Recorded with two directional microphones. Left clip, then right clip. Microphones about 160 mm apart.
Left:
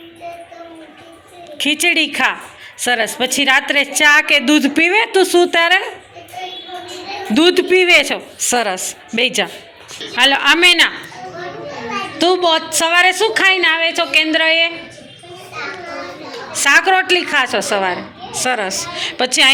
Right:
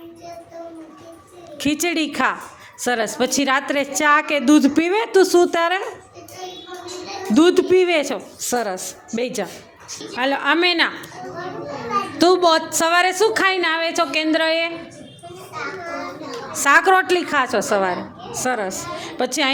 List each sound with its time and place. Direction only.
1.5 s a woman's voice: 25° right (ahead or behind)
7.3 s a man's voice: 20° right (ahead or behind)
12.1 s a woman's voice: 30° right (ahead or behind)
16.5 s a woman's voice: 25° right (ahead or behind)